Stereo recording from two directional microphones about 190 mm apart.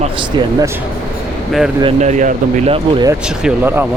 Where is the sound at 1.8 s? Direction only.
40° right (ahead or behind).